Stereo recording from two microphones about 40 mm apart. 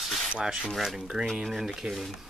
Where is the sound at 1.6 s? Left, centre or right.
Centre.